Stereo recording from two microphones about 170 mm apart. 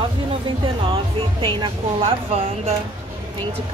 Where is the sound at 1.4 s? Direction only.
25° right (ahead or behind).